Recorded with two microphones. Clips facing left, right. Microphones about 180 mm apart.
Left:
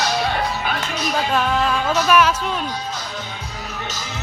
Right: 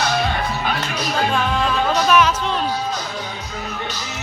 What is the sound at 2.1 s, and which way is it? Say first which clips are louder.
Music: left 2 dB; 10° left (ahead or behind).